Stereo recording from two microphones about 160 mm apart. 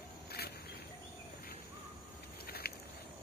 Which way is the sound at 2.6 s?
80° left.